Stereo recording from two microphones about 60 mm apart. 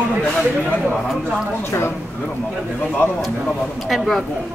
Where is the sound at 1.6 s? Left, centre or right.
Left.